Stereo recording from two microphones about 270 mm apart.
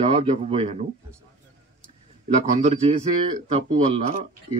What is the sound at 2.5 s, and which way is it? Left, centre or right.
Speech, right.